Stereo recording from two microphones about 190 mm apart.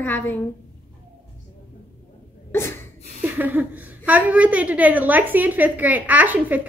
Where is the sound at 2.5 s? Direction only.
15° left (ahead or behind).